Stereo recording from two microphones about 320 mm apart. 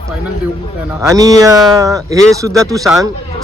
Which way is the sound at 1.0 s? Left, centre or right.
Centre.